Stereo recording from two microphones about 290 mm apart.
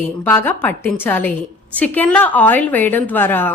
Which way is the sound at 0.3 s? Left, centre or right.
Centre.